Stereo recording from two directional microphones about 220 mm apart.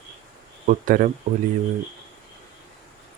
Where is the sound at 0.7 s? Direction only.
35° right (ahead or behind).